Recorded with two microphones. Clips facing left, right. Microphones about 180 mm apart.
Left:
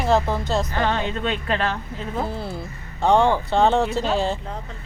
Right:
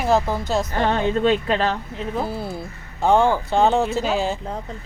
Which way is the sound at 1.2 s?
30° right (ahead or behind).